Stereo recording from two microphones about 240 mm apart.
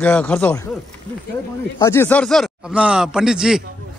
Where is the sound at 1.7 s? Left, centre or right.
Centre.